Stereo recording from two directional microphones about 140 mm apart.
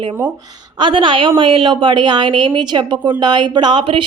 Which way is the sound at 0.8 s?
35° right (ahead or behind).